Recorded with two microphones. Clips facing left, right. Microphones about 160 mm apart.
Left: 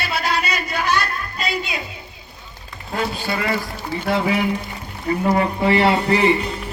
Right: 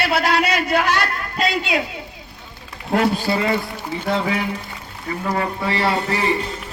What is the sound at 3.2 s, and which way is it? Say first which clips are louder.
Speech: right 3 dB; 25° right (ahead or behind).